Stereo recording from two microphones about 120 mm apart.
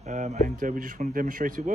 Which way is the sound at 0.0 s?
75° right (ahead or behind).